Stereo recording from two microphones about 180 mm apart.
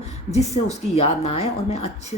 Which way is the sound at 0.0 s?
35° left (ahead or behind).